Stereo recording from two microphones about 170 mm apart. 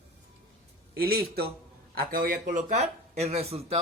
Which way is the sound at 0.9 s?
65° right (ahead or behind).